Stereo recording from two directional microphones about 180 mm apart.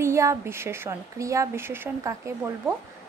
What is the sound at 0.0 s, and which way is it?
A woman's voice, 15° right (ahead or behind).